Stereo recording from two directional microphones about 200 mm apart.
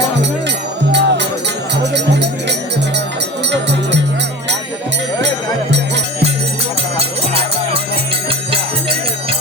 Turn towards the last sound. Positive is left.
turn(degrees=-30)  # may be behind; listen again after turning